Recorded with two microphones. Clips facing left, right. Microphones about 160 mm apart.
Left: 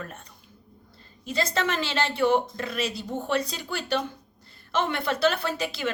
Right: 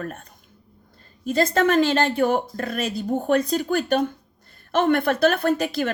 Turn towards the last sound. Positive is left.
turn(degrees=-50)  # may be behind; listen again after turning